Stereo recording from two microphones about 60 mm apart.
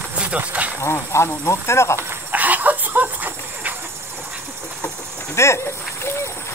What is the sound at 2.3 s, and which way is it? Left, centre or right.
Dog, right.